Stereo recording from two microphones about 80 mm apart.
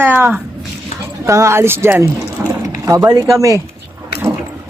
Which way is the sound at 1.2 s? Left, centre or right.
Right.